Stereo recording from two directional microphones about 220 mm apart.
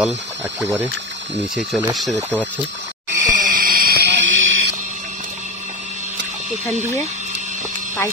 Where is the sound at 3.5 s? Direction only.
40° right (ahead or behind).